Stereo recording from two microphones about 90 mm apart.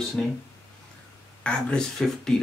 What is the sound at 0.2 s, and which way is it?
Speech, 5° left (ahead or behind).